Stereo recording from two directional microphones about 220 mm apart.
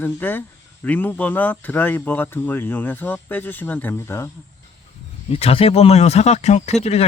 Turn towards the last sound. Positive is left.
turn(degrees=30)  # may be behind; listen again after turning